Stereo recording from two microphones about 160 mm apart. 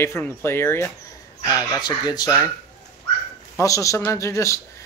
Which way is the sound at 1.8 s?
25° left (ahead or behind).